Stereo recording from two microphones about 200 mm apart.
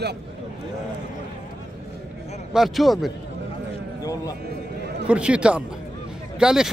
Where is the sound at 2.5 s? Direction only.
Centre (ahead or behind).